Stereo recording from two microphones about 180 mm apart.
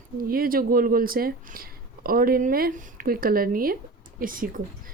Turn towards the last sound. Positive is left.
turn(degrees=-50)  # may be behind; listen again after turning